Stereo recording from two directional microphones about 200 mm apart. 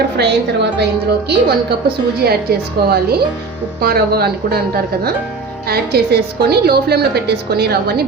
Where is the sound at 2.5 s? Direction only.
50° right (ahead or behind).